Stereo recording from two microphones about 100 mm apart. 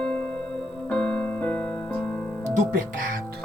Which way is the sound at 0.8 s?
15° left (ahead or behind).